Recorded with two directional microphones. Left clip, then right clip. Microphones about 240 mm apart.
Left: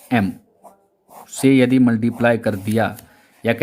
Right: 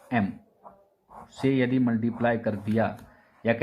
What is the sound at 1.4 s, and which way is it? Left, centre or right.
Speech, left.